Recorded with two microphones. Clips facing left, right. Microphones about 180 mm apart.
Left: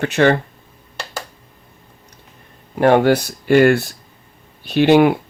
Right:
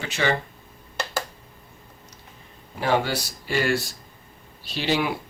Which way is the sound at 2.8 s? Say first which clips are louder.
Left 11 dB; 60° left (ahead or behind).